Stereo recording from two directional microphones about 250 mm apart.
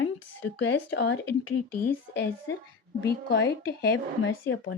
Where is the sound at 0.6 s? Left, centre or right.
Left.